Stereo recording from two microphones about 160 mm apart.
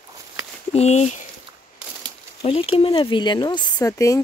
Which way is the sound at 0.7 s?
45° left (ahead or behind).